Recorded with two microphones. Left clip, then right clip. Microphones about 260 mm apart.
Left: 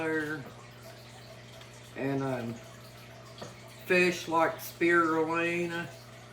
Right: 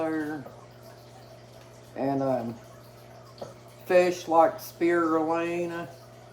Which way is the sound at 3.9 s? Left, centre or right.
Centre.